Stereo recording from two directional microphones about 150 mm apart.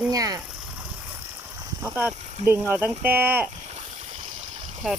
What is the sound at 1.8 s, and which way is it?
Speech, 10° right (ahead or behind).